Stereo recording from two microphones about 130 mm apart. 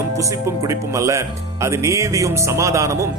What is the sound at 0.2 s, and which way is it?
Speech, 25° right (ahead or behind).